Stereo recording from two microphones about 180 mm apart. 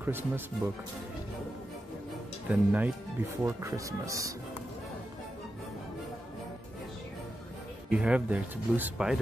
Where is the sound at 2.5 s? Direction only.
10° right (ahead or behind).